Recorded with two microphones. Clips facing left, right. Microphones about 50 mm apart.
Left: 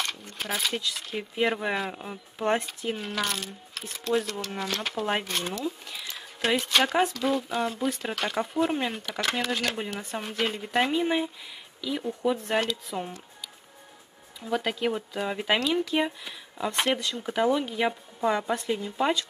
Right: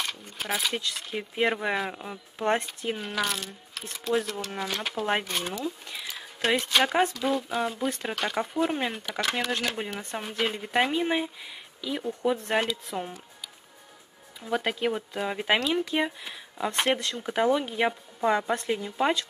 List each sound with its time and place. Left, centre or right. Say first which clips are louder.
0.0 s speech: left 1 dB; centre
14.4 s speech: even; centre